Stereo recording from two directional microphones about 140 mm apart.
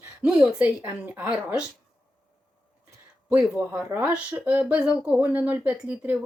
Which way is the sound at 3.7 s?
10° right (ahead or behind).